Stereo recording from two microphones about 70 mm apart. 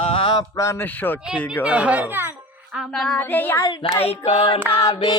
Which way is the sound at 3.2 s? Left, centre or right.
Left.